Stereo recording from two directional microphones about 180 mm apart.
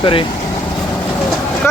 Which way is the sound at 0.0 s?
30° left (ahead or behind).